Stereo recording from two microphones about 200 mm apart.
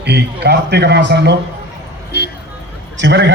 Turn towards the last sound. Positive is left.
turn(degrees=-60)  # may be behind; listen again after turning